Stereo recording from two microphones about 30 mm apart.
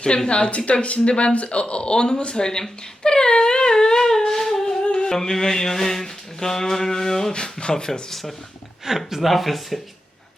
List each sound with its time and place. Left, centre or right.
0.0 s speech: left
2.4 s humming: left
4.8 s music: left
5.0 s mantra: centre
7.3 s speech: left
8.9 s speech: centre
9.2 s speech: centre